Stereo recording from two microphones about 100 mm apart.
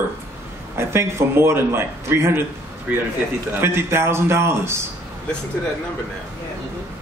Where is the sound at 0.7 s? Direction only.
25° right (ahead or behind).